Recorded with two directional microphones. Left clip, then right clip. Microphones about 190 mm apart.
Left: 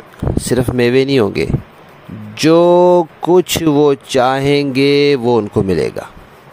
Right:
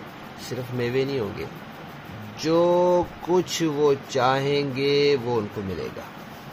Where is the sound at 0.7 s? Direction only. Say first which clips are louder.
Left 12 dB; 65° left (ahead or behind).